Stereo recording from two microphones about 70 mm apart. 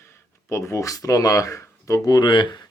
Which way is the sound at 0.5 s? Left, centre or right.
Left.